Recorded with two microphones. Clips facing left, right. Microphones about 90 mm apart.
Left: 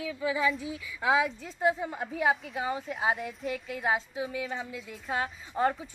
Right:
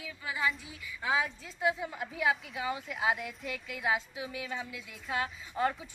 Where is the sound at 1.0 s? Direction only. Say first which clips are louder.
Left 5 dB; 90° left.